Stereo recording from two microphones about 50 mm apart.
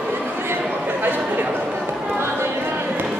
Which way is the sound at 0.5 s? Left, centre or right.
Right.